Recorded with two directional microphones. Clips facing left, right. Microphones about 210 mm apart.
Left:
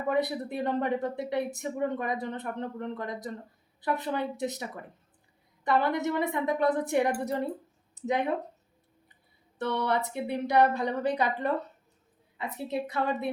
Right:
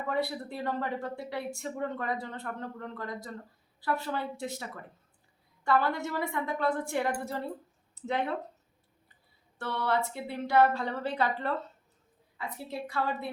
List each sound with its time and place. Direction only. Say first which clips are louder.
0.1 s speech: left 4 dB; 20° left (ahead or behind)
9.6 s speech: left 2 dB; 20° left (ahead or behind)